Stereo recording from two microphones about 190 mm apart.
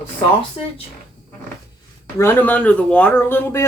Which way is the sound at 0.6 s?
30° left (ahead or behind).